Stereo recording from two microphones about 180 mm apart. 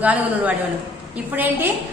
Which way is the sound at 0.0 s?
10° right (ahead or behind).